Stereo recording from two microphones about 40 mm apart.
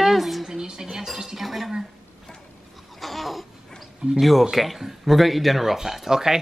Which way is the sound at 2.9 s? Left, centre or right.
Centre.